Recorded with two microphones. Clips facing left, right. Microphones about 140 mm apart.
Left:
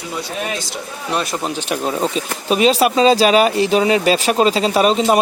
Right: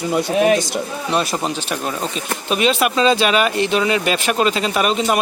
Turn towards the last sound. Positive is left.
turn(degrees=30)  # may be behind; listen again after turning